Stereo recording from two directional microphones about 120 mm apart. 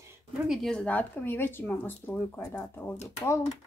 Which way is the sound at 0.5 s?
5° left (ahead or behind).